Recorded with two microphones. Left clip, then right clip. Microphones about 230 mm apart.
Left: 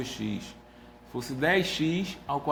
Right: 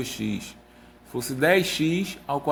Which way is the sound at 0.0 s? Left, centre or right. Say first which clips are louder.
Right 4 dB; right.